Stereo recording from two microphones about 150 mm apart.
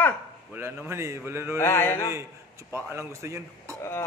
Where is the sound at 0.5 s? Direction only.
15° right (ahead or behind).